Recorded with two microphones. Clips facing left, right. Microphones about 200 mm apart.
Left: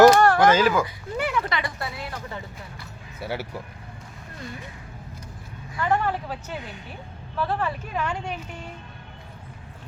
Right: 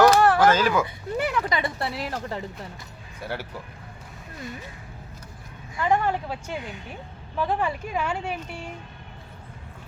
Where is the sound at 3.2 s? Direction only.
10° left (ahead or behind).